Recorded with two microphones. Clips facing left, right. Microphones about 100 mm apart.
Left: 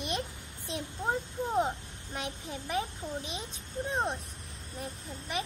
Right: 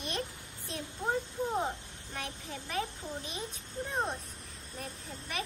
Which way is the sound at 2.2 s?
20° left (ahead or behind).